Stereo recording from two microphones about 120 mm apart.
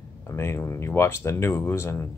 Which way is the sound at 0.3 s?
20° left (ahead or behind).